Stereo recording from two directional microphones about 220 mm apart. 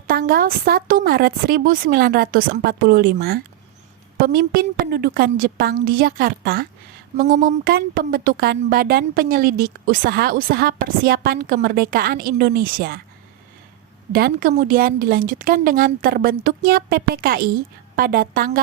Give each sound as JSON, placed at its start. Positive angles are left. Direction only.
{"t": 0.1, "sound": "a woman's voice", "side_deg": -45}
{"t": 14.1, "sound": "a woman's voice", "side_deg": -45}